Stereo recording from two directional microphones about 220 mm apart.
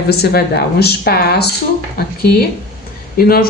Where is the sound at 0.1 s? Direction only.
45° left (ahead or behind).